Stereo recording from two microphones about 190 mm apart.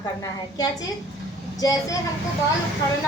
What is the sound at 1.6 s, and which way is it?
Speech, 15° left (ahead or behind).